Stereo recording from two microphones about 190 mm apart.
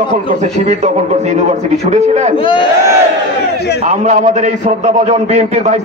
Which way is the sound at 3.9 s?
40° right (ahead or behind).